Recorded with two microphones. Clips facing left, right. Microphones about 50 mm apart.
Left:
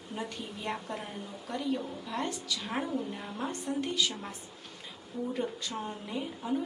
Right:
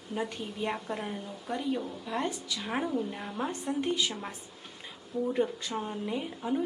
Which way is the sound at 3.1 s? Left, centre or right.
Centre.